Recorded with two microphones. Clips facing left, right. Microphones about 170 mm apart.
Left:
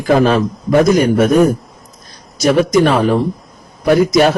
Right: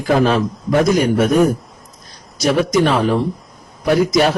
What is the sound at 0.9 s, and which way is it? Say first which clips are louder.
Speech: left 3 dB; 45° left (ahead or behind).